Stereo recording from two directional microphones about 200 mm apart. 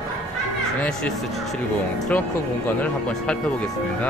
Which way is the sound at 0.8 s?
5° left (ahead or behind).